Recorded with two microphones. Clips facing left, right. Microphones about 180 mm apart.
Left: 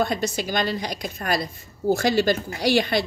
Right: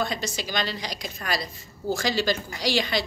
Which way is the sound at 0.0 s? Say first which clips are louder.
Left 5 dB; 55° left (ahead or behind).